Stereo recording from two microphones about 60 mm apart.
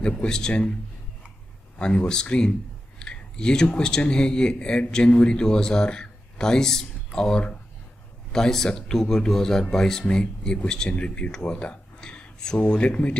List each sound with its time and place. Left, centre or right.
0.0 s speech: centre
2.0 s speech: centre
3.0 s clicking: centre
3.7 s speech: centre